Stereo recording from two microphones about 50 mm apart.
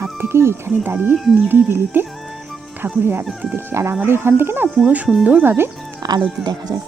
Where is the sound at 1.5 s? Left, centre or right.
Right.